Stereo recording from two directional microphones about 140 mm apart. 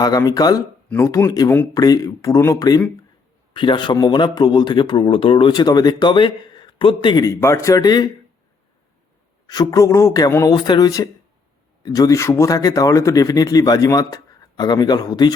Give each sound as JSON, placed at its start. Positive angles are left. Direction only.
{"t": 0.0, "sound": "a man's voice", "side_deg": 25}
{"t": 9.5, "sound": "a man's voice", "side_deg": 25}